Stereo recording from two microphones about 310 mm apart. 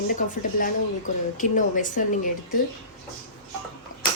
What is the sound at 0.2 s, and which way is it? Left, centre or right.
Speech, left.